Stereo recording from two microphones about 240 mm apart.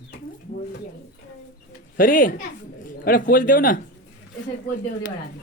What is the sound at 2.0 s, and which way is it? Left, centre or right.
Speech, left.